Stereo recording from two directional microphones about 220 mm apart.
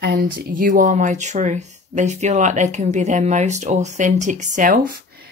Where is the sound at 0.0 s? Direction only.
40° right (ahead or behind).